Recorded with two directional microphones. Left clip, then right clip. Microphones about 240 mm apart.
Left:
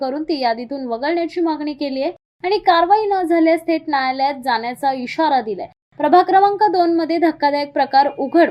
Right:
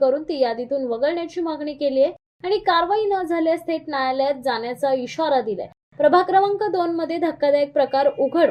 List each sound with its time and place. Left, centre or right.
0.0 s a woman's voice: left